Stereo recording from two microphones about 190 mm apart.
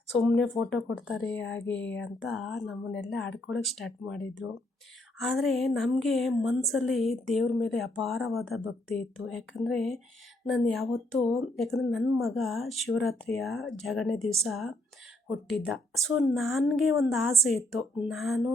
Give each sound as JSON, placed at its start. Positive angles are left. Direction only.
{"t": 0.2, "sound": "speech", "side_deg": 0}